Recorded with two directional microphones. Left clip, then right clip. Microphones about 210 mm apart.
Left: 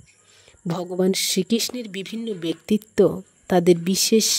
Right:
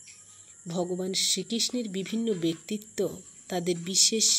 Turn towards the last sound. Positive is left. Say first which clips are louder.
# left 5 dB
turn(degrees=45)  # may be behind; listen again after turning